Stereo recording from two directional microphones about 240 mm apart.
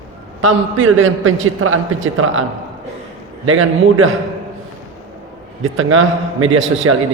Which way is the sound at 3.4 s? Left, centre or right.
Right.